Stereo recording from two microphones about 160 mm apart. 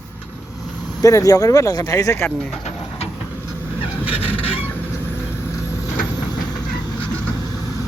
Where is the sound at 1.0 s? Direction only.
20° left (ahead or behind).